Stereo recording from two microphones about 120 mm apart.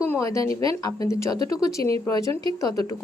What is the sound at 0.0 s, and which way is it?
A woman's voice, 25° left (ahead or behind).